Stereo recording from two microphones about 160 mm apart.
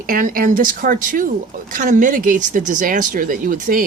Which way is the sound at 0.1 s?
60° right (ahead or behind).